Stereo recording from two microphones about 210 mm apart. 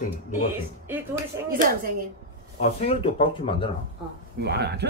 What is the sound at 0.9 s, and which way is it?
Speech, 10° right (ahead or behind).